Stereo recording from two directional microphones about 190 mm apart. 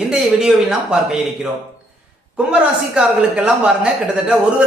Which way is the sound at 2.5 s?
5° right (ahead or behind).